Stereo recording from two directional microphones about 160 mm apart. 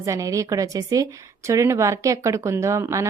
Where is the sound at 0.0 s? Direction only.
20° right (ahead or behind).